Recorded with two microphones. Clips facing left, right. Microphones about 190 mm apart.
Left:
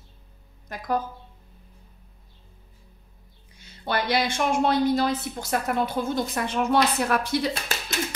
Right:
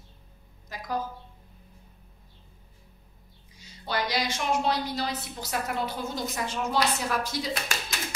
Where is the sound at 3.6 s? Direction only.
55° left (ahead or behind).